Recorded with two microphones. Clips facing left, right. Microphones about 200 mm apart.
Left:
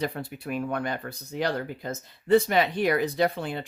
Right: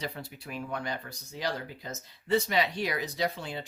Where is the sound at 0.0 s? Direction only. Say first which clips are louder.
Left 8 dB; 55° left (ahead or behind).